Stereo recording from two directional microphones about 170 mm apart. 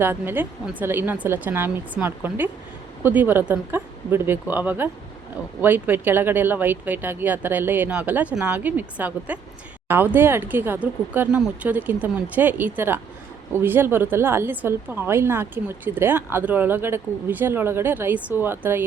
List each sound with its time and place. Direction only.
0.0 s a woman's voice: 15° right (ahead or behind)